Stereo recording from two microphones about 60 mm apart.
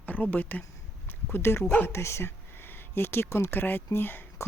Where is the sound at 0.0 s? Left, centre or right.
Left.